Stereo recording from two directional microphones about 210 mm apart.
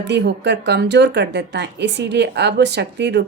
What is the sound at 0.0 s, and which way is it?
Speech, 55° right (ahead or behind).